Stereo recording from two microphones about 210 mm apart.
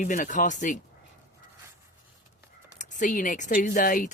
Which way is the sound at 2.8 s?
35° left (ahead or behind).